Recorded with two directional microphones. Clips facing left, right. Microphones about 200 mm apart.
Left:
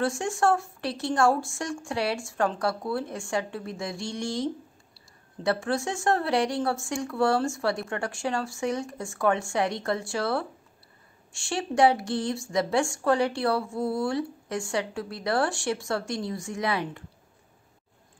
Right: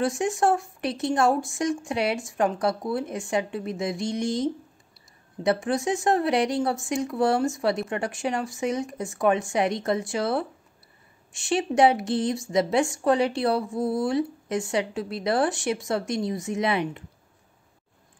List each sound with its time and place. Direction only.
0.0 s a woman's voice: 20° right (ahead or behind)